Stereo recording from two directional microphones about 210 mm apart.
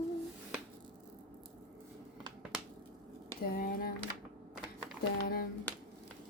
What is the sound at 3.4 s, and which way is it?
Speech, 45° left (ahead or behind).